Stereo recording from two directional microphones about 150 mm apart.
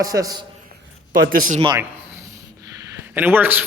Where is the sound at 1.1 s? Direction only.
70° right (ahead or behind).